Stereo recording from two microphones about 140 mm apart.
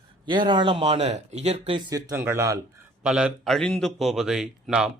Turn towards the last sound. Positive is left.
turn(degrees=-5)  # may be behind; listen again after turning